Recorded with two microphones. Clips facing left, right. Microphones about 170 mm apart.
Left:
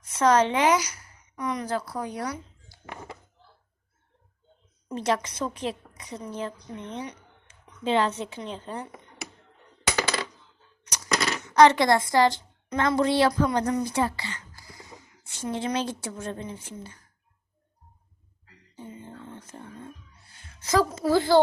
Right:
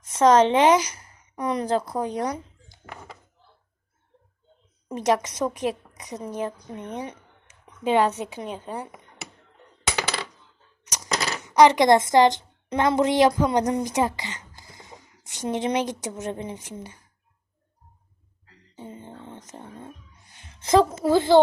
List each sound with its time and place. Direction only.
0.1 s a woman's voice: 20° right (ahead or behind)
4.9 s a woman's voice: 15° right (ahead or behind)
10.9 s speech: 15° right (ahead or behind)
19.0 s a sound: 20° right (ahead or behind)
20.7 s a woman's voice: 25° right (ahead or behind)